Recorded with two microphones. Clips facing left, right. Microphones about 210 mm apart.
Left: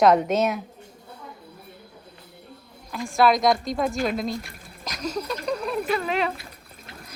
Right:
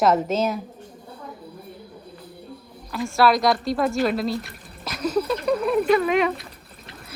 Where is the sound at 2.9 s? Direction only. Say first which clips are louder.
Right 1 dB; centre (ahead or behind).